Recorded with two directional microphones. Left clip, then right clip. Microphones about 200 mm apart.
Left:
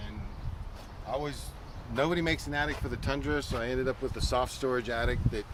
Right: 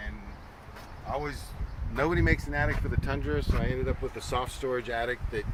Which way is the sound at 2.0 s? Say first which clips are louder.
Right 2 dB; 50° left (ahead or behind).